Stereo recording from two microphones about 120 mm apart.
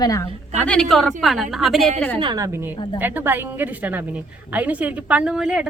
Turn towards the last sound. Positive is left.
turn(degrees=-5)  # may be behind; listen again after turning